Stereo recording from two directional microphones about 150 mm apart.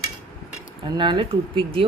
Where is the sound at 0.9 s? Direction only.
30° right (ahead or behind).